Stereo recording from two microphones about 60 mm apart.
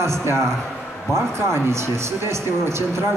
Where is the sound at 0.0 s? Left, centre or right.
Right.